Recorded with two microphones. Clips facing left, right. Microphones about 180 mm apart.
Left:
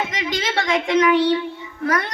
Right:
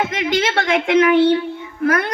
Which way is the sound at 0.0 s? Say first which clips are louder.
Right 6 dB; 55° right (ahead or behind).